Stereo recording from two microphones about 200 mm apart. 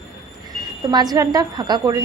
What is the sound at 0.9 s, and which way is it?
A woman's voice, 20° right (ahead or behind).